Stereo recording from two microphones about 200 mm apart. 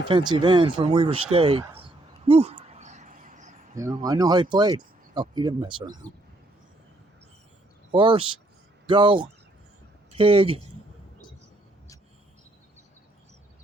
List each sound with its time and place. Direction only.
0.1 s speech: 20° right (ahead or behind)
2.2 s a sound: 30° right (ahead or behind)
4.0 s speech: 20° right (ahead or behind)
7.9 s speech: 25° right (ahead or behind)